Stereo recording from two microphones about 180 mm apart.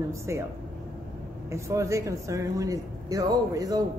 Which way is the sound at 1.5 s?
15° right (ahead or behind).